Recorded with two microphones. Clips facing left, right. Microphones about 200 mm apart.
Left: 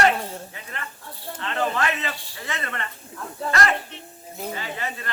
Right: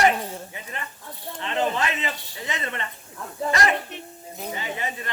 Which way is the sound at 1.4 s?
20° right (ahead or behind).